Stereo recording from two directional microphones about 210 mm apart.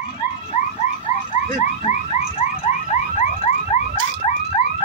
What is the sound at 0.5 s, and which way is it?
Car alarm, 35° left (ahead or behind).